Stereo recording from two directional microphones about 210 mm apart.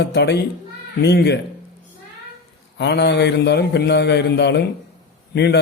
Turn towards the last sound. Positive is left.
turn(degrees=50)  # may be behind; listen again after turning